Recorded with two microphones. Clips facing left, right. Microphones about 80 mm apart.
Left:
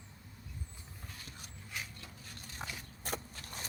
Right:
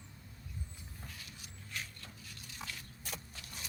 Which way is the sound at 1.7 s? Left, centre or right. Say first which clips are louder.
Left 1 dB; centre.